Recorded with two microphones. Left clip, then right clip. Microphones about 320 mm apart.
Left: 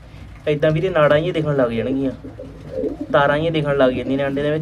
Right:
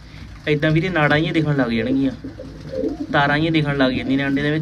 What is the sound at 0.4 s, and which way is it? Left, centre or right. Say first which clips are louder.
Speech: left 2 dB; left.